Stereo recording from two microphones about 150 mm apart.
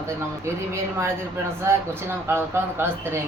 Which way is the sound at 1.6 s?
20° right (ahead or behind).